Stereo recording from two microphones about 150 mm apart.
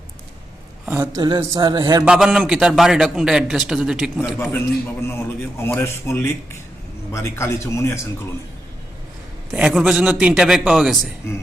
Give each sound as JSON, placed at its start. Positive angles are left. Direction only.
{"t": 0.9, "sound": "a man's voice", "side_deg": -25}
{"t": 2.0, "sound": "a man's voice", "side_deg": -5}
{"t": 4.5, "sound": "a man's voice", "side_deg": 15}
{"t": 9.5, "sound": "a man's voice", "side_deg": -5}